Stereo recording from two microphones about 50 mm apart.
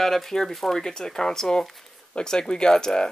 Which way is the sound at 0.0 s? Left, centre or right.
Centre.